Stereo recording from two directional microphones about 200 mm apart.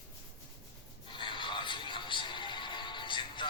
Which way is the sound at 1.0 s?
25° left (ahead or behind).